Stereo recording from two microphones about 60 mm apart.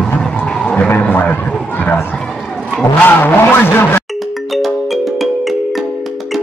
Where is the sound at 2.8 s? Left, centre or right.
Left.